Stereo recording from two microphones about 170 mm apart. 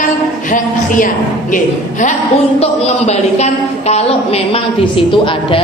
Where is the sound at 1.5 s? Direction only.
45° left (ahead or behind); by 5.6 s 30° left (ahead or behind).